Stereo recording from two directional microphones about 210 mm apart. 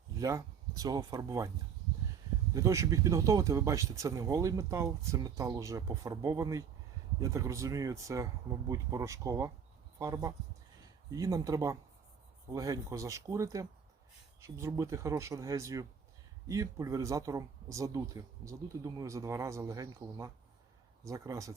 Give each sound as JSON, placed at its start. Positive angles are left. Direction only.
{"t": 0.2, "sound": "speech", "side_deg": -15}
{"t": 2.6, "sound": "speech", "side_deg": -15}